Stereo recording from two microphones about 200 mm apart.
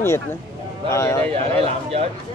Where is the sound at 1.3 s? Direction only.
30° right (ahead or behind).